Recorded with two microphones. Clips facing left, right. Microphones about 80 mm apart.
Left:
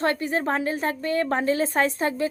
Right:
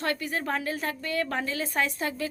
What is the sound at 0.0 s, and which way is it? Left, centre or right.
A woman's voice, left.